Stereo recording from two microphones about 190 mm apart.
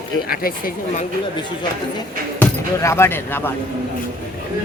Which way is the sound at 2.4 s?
15° left (ahead or behind).